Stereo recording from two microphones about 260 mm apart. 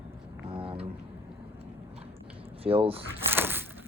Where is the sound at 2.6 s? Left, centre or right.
Right.